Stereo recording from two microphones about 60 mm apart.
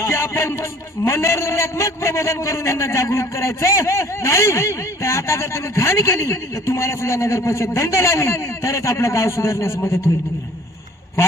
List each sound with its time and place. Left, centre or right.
0.0 s a man's voice: left